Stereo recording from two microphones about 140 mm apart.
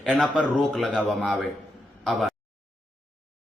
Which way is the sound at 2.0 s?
Centre (ahead or behind).